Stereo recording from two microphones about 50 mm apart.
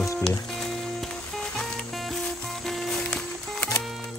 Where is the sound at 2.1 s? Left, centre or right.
Centre.